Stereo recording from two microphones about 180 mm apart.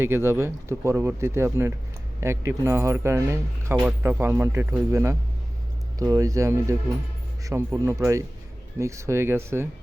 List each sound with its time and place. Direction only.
0.0 s speech: 15° right (ahead or behind)